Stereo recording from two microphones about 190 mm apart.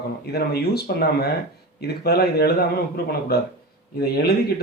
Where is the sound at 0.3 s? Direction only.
55° left (ahead or behind).